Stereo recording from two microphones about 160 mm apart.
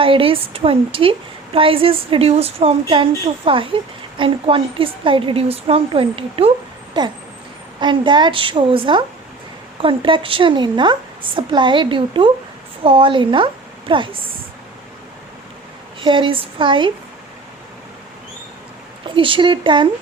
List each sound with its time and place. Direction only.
0.0 s a woman's voice: 35° right (ahead or behind)
7.0 s a sound: 30° right (ahead or behind)
7.8 s a woman's voice: 30° right (ahead or behind)
16.0 s a woman's voice: 30° right (ahead or behind)
19.0 s a woman's voice: 30° right (ahead or behind)